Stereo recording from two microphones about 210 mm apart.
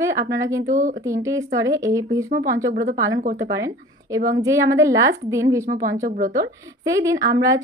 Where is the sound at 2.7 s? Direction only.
45° right (ahead or behind).